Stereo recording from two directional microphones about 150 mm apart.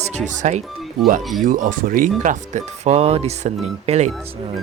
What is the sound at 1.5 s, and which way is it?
Speech, 65° right (ahead or behind).